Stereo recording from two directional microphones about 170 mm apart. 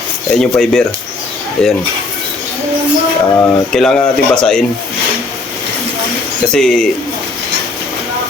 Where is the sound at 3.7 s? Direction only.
5° left (ahead or behind).